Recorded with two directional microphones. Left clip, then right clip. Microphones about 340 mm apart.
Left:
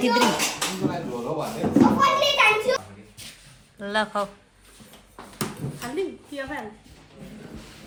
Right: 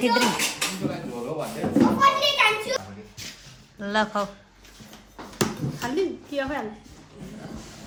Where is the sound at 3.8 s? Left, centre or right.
Centre.